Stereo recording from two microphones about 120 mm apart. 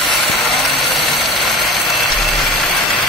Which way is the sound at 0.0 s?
Centre (ahead or behind).